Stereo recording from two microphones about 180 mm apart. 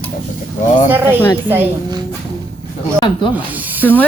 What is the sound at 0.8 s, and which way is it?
Speech, 10° right (ahead or behind).